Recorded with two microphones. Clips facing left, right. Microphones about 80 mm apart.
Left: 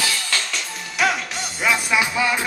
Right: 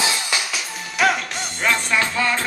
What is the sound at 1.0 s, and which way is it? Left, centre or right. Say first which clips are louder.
Music: right 2 dB; centre.